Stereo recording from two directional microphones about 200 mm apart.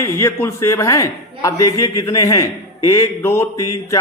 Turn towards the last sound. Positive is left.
turn(degrees=15)  # may be behind; listen again after turning